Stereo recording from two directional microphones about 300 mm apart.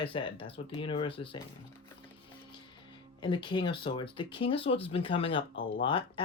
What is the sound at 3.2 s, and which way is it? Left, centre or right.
Speech, centre.